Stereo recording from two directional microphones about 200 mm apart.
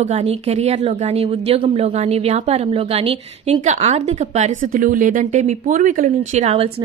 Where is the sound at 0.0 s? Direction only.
30° right (ahead or behind).